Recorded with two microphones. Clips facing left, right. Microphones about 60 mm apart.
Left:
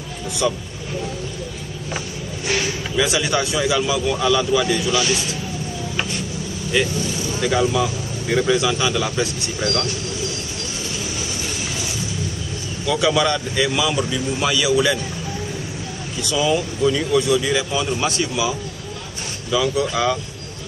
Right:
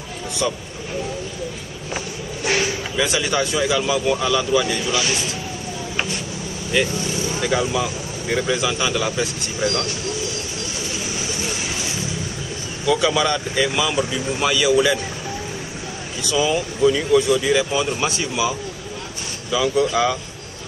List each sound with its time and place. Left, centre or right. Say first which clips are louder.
3.0 s speech: left 1 dB; centre
7.3 s speech: left 3 dB; centre
9.6 s speech: right 1 dB; centre
12.8 s speech: even; centre
16.2 s speech: even; centre
19.7 s speech: right 1 dB; centre